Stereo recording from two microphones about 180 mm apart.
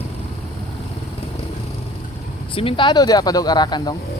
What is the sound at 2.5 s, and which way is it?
Speech, 30° left (ahead or behind).